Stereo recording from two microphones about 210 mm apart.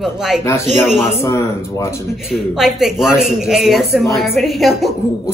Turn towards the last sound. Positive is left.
turn(degrees=0)  # may be behind; listen again after turning